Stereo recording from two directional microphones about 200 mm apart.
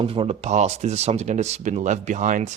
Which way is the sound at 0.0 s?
25° right (ahead or behind).